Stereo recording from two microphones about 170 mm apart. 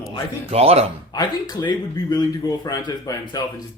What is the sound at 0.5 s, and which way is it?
Speech, 35° right (ahead or behind).